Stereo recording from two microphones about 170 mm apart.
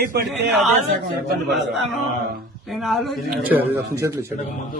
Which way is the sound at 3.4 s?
10° right (ahead or behind).